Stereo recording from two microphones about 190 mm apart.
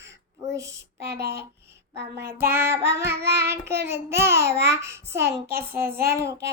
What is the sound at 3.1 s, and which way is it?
Child singing, 60° right (ahead or behind).